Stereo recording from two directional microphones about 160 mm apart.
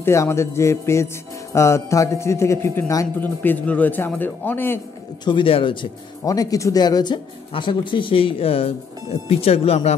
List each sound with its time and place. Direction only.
0.0 s music: 15° left (ahead or behind)
5.2 s speech: 30° left (ahead or behind)